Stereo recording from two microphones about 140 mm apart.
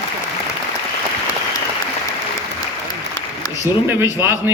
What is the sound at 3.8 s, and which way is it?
Speech, 15° right (ahead or behind).